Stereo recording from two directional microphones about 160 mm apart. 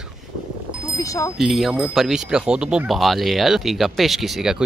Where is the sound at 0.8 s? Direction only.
20° left (ahead or behind).